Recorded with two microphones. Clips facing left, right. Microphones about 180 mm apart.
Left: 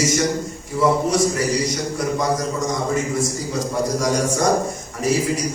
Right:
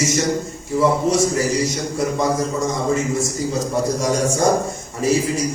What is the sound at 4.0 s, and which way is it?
A man's voice, 25° right (ahead or behind).